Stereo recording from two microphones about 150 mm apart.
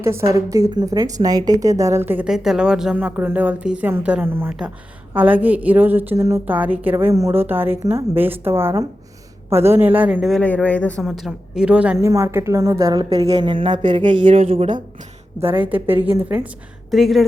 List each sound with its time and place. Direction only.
0.0 s a woman's voice: 20° right (ahead or behind); by 11.0 s 10° left (ahead or behind)
11.2 s a woman's voice: 5° right (ahead or behind); by 13.2 s 25° right (ahead or behind)
13.2 s speech: 40° right (ahead or behind)
16.9 s speech: centre (ahead or behind)